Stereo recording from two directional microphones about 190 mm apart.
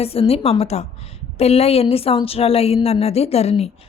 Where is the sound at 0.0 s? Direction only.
30° left (ahead or behind).